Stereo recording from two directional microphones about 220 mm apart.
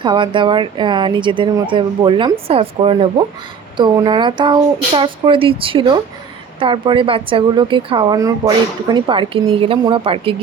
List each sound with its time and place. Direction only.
0.0 s a woman's voice: 20° right (ahead or behind)